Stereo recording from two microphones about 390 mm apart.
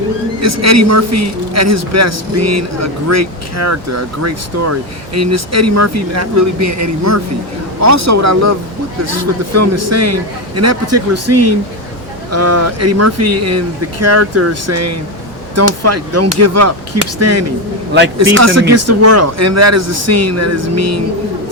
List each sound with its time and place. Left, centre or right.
0.4 s a man's voice: right